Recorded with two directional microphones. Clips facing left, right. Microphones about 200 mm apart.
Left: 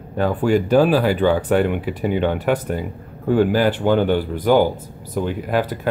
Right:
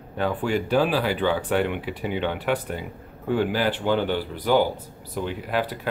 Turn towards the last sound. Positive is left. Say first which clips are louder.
# left 5 dB
turn(degrees=45)  # may be behind; listen again after turning